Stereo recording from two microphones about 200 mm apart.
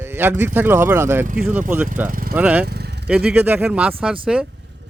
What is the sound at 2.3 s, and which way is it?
Speech, 5° right (ahead or behind).